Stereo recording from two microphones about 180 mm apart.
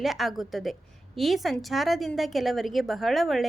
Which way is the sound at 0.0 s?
Centre (ahead or behind).